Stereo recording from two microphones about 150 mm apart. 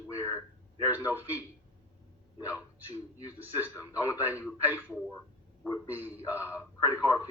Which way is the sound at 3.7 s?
20° left (ahead or behind).